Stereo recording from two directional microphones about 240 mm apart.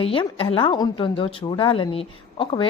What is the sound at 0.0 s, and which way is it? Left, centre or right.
A woman's voice, left.